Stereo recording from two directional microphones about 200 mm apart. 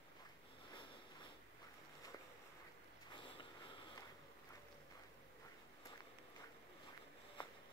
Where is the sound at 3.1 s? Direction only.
25° left (ahead or behind).